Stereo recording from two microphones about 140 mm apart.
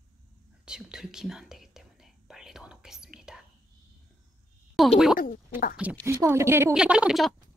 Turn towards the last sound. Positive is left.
turn(degrees=0)  # may be behind; listen again after turning